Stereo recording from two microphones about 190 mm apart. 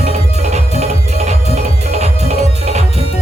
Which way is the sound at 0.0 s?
35° right (ahead or behind).